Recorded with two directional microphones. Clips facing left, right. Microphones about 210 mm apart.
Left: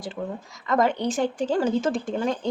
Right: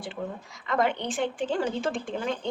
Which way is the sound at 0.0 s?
40° left (ahead or behind).